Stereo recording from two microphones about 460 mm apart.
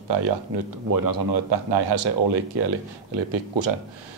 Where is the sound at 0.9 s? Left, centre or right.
Right.